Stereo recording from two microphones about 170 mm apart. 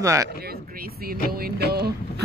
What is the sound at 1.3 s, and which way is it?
Music, 65° right (ahead or behind).